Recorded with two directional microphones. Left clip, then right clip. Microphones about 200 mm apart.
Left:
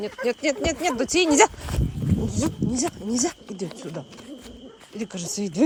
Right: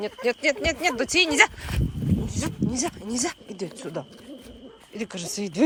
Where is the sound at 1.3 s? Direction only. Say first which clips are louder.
Left 2 dB; 25° left (ahead or behind); by 4.1 s 5° left (ahead or behind).